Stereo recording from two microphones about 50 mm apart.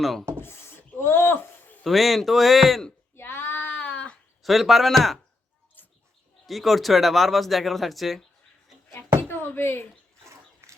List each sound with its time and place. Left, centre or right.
0.0 s speech: centre
0.4 s a sound: left
1.8 s speech: centre
3.2 s child singing: left
3.8 s a sound: left
4.4 s speech: centre
5.8 s bird: left
6.4 s speech: centre
9.3 s a sound: left